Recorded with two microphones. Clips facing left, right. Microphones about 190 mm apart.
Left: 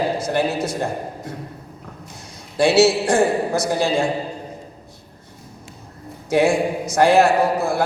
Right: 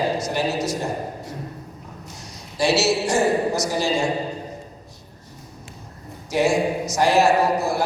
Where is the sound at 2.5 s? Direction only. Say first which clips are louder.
Left 5 dB; 55° left (ahead or behind).